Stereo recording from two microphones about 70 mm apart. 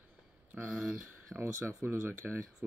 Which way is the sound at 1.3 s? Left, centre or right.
Right.